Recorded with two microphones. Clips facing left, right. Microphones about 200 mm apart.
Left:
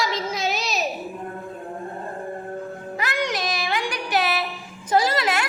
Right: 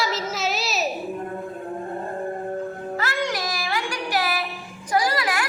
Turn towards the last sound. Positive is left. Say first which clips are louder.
# left 2 dB
turn(degrees=25)  # may be behind; listen again after turning